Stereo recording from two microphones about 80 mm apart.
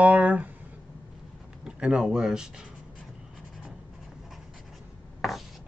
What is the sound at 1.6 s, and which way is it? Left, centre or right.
Speech, centre.